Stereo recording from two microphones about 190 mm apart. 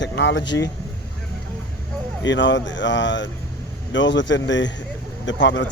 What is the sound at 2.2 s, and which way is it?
Speech, 70° left (ahead or behind).